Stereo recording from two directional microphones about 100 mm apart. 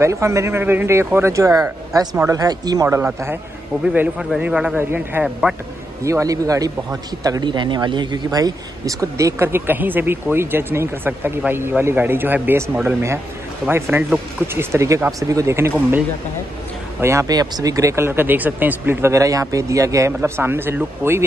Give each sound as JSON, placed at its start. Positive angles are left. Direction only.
{"t": 0.0, "sound": "a man's voice", "side_deg": -30}
{"t": 4.4, "sound": "a man's voice", "side_deg": -10}
{"t": 5.2, "sound": "speech", "side_deg": -5}
{"t": 6.0, "sound": "a man's voice", "side_deg": -35}
{"t": 7.4, "sound": "speech", "side_deg": -50}
{"t": 17.0, "sound": "speech", "side_deg": -30}